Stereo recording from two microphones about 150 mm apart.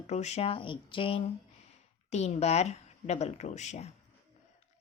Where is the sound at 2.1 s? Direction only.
50° left (ahead or behind).